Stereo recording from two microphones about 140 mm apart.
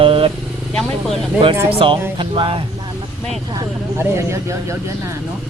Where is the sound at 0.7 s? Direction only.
5° left (ahead or behind).